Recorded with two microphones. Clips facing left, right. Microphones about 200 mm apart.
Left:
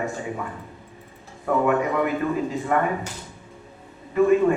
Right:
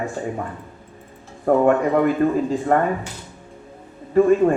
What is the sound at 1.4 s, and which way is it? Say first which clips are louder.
Speech: right 5 dB; 45° right (ahead or behind).